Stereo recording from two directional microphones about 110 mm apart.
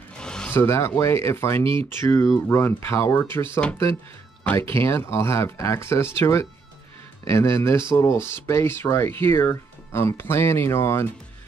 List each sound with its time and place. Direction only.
0.2 s music: 5° left (ahead or behind)
0.5 s speech: 25° left (ahead or behind)
1.6 s speech: 55° right (ahead or behind)
2.0 s speech: 25° left (ahead or behind)
2.2 s speech: 10° left (ahead or behind)
2.5 s speech: 25° left (ahead or behind)